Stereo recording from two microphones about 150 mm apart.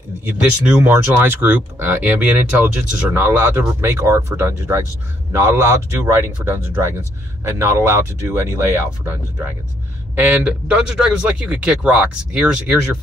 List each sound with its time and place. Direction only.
0.2 s speech: 10° right (ahead or behind)